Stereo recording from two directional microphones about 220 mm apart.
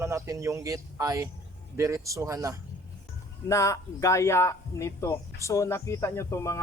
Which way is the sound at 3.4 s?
15° left (ahead or behind).